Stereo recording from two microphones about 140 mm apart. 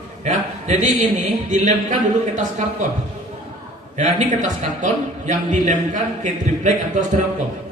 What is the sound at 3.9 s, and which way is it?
A man's voice, 55° right (ahead or behind).